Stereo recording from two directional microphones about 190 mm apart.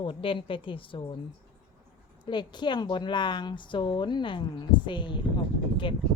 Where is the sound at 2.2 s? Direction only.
25° left (ahead or behind).